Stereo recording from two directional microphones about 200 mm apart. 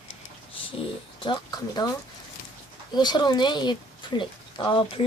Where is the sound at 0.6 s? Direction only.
25° left (ahead or behind).